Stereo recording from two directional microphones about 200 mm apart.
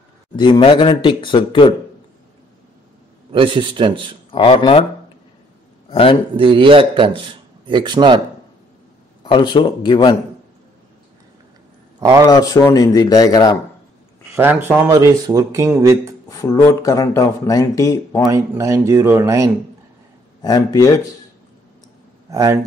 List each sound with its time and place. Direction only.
0.4 s speech: 25° left (ahead or behind)
3.3 s a man's voice: 25° right (ahead or behind)
4.3 s speech: 25° left (ahead or behind)
5.9 s a man's voice: 30° left (ahead or behind)
6.3 s a man's voice: 25° right (ahead or behind)
9.2 s speech: 25° left (ahead or behind)
12.3 s speech: 15° left (ahead or behind)
14.3 s a man's voice: 10° right (ahead or behind)
16.3 s speech: 15° left (ahead or behind)
18.3 s a man's voice: 15° right (ahead or behind)
20.4 s speech: 15° left (ahead or behind)
22.3 s a man's voice: 15° right (ahead or behind)